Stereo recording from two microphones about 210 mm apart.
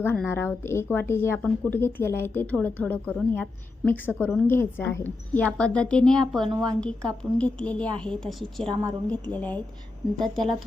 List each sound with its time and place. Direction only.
0.0 s a woman's voice: 10° left (ahead or behind)
6.5 s a woman's voice: 20° right (ahead or behind)
7.3 s a woman's voice: 5° left (ahead or behind)
8.6 s a woman's voice: 20° right (ahead or behind)
9.0 s a woman's voice: 5° left (ahead or behind)